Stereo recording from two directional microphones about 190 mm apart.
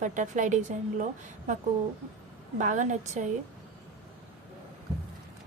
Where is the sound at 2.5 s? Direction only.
40° right (ahead or behind).